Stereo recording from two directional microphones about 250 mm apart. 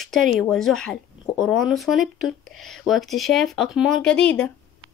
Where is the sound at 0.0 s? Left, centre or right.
Centre.